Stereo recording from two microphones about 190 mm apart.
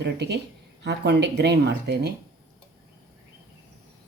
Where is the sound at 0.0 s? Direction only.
60° right (ahead or behind).